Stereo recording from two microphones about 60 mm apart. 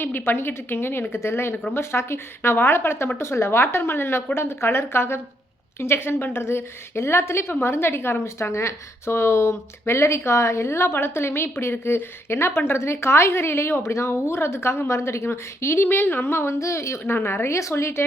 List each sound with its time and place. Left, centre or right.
0.0 s a woman's voice: left
17.0 s speech: left